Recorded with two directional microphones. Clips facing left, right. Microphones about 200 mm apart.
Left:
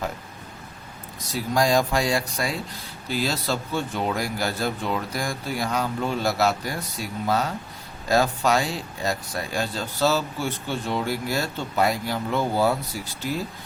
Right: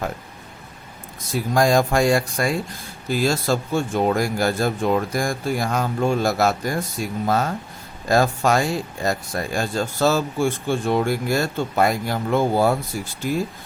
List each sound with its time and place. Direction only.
1.3 s speech: 50° right (ahead or behind)